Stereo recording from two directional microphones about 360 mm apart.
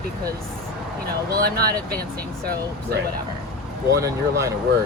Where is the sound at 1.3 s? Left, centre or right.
Right.